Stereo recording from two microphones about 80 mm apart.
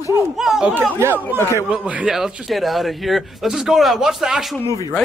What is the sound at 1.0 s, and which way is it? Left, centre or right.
Speech, right.